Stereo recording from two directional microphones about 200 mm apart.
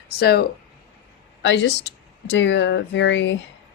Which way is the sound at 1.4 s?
65° left (ahead or behind).